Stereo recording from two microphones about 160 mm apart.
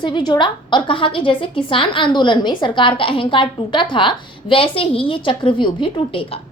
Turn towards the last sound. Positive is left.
turn(degrees=30)  # may be behind; listen again after turning